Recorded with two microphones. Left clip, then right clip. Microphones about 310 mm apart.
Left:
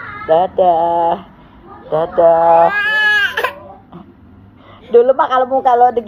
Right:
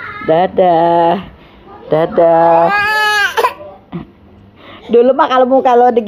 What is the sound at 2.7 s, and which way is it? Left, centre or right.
Baby cry, centre.